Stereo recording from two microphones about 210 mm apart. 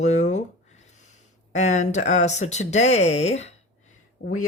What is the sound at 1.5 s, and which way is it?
Speech, 35° left (ahead or behind).